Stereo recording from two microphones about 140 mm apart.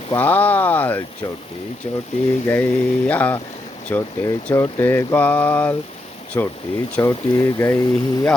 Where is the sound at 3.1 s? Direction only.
10° left (ahead or behind).